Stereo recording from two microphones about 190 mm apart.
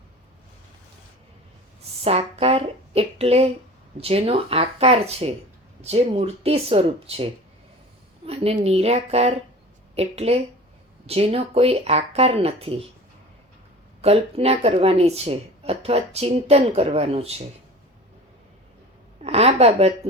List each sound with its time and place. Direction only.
2.0 s a sound: 30° right (ahead or behind)
4.0 s speech: 30° right (ahead or behind)
8.3 s speech: 30° right (ahead or behind)
14.0 s speech: 30° right (ahead or behind)
19.2 s speech: 35° right (ahead or behind)